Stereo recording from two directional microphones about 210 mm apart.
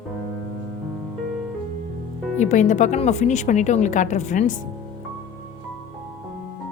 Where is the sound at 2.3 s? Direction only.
35° left (ahead or behind).